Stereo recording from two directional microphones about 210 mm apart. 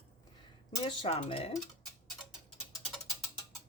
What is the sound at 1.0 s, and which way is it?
Speech, 30° left (ahead or behind).